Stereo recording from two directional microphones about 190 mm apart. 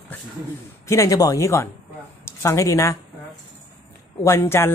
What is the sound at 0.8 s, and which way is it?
Speech, 15° left (ahead or behind).